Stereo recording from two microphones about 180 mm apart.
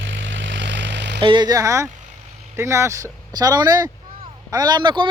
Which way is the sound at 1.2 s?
25° right (ahead or behind).